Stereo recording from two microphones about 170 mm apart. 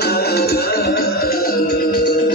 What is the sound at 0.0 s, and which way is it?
Music, 70° left (ahead or behind).